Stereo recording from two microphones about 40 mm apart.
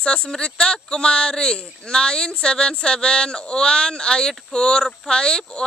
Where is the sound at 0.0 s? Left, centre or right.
Left.